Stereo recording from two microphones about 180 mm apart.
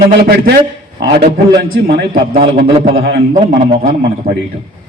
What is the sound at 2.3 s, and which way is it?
Speech, 30° right (ahead or behind).